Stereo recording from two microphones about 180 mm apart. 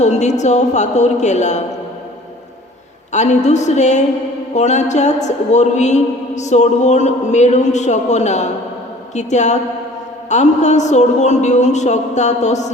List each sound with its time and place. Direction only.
0.0 s a man's voice: 40° left (ahead or behind)
3.1 s a man's voice: 40° left (ahead or behind)